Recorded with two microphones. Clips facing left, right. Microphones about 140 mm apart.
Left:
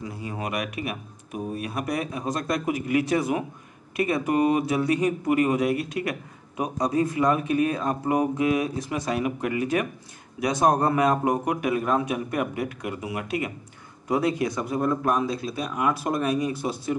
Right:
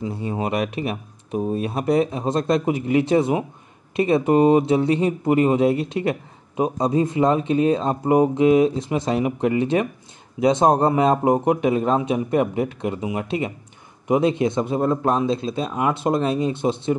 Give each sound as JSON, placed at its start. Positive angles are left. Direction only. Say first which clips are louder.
{"t": 0.0, "sound": "speech", "louder": "right 7 dB", "side_deg": -25}